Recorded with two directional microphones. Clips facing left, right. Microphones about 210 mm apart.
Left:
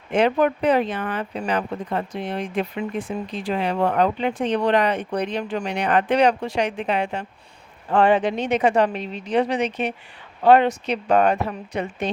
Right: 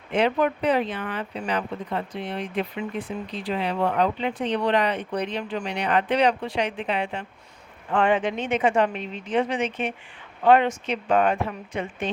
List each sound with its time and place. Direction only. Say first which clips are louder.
0.1 s speech: left 3 dB; 45° left (ahead or behind)